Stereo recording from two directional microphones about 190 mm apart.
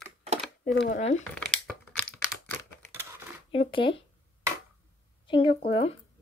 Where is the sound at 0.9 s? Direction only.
35° left (ahead or behind).